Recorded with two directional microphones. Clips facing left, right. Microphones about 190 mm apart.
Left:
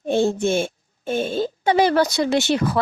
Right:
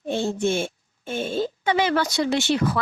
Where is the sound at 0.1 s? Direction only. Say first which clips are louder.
Left 4 dB; 45° left (ahead or behind).